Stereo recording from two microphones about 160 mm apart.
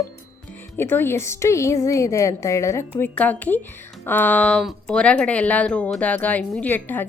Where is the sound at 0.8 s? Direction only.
15° left (ahead or behind).